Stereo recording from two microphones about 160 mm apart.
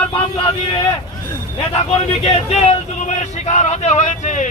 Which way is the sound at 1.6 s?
35° left (ahead or behind).